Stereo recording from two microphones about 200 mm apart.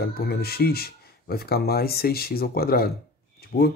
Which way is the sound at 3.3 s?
50° left (ahead or behind).